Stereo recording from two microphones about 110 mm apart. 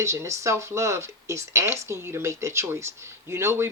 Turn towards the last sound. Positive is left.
turn(degrees=-25)  # may be behind; listen again after turning